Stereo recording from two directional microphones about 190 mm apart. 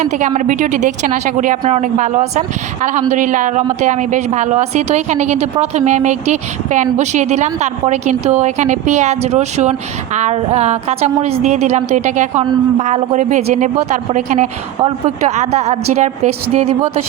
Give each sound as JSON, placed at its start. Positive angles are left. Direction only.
{"t": 0.0, "sound": "a woman's voice", "side_deg": -40}